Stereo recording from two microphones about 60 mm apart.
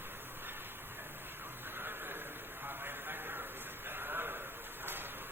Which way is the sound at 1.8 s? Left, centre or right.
Right.